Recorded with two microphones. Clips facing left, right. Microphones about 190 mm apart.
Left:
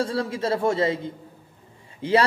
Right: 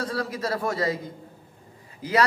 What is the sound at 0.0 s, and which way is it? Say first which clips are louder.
Speech: left 4 dB; 25° left (ahead or behind).